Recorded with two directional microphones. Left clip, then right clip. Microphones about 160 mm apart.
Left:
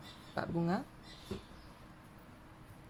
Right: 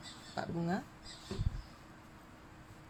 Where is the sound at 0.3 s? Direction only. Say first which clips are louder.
Left 2 dB; 30° left (ahead or behind).